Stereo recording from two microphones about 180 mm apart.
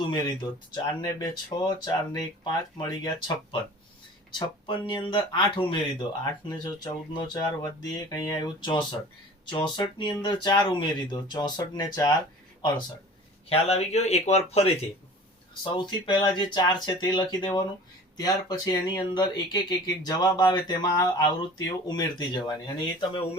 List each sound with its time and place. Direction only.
0.0 s speech: 25° left (ahead or behind)
13.5 s speech: 35° left (ahead or behind)
15.6 s speech: 25° left (ahead or behind)